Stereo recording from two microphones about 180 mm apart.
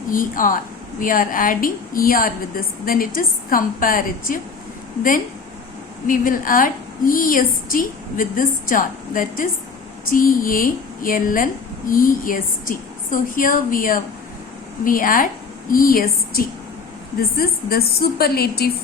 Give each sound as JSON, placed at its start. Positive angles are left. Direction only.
{"t": 0.1, "sound": "a woman's voice", "side_deg": 50}
{"t": 6.1, "sound": "a woman's voice", "side_deg": 50}